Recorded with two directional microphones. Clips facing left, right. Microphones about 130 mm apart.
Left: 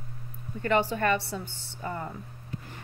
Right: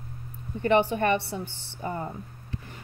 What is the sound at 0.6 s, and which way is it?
A woman's voice, 20° right (ahead or behind).